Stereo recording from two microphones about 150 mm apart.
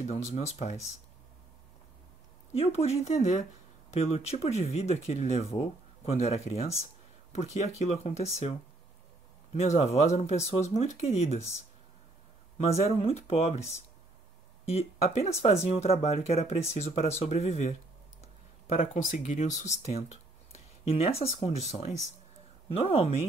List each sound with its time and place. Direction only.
0.0 s speech: 45° left (ahead or behind)
2.5 s speech: 40° left (ahead or behind)
12.5 s speech: 45° left (ahead or behind)
14.7 s speech: 45° left (ahead or behind)
18.8 s speech: 55° left (ahead or behind)